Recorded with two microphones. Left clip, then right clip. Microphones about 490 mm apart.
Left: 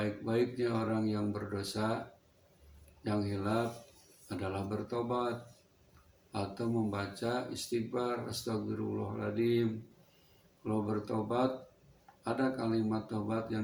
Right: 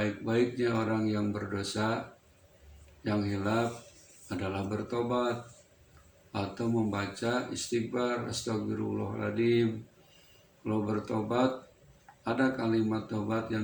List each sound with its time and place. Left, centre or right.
0.0 s speech: left
3.0 s speech: left
6.3 s speech: left